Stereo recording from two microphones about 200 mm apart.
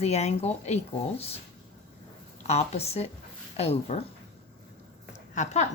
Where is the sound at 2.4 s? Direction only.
30° left (ahead or behind).